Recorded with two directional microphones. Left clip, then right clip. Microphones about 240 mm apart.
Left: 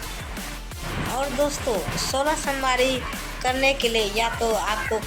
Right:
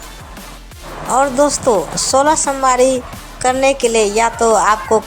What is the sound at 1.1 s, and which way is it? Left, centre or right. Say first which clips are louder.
A woman's voice: right 12 dB; right.